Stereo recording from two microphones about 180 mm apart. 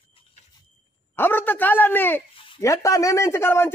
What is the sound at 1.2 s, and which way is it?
A man's voice, 10° left (ahead or behind).